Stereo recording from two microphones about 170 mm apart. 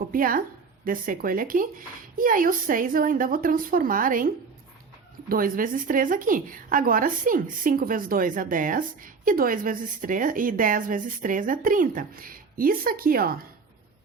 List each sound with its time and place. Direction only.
0.1 s speech: 55° right (ahead or behind)
5.3 s a woman's voice: 55° right (ahead or behind)